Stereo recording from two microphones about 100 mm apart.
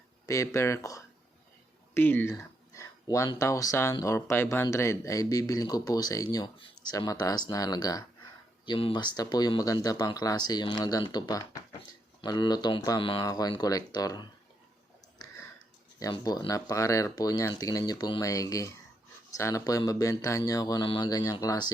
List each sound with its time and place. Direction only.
0.3 s speech: 30° left (ahead or behind)
1.9 s speech: 20° left (ahead or behind)
2.3 s a sound: 30° left (ahead or behind)
3.3 s speech: 30° left (ahead or behind)
13.0 s speech: 60° left (ahead or behind)
13.2 s speech: 40° left (ahead or behind)
16.5 s speech: 35° left (ahead or behind)